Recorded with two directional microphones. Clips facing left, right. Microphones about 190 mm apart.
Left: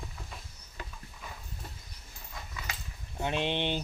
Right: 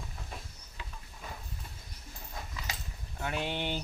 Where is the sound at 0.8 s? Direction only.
45° left (ahead or behind).